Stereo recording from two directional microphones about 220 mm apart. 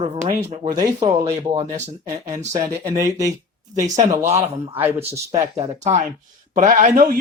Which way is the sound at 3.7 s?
35° right (ahead or behind).